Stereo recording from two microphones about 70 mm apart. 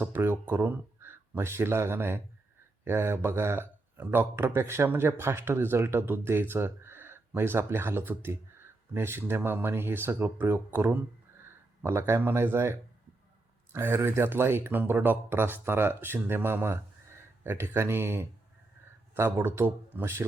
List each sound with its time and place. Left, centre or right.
0.0 s speech: right
13.7 s speech: right